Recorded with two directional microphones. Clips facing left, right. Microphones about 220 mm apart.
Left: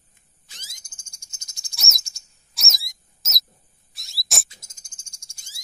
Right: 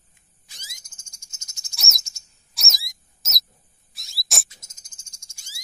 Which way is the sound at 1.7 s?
Centre (ahead or behind).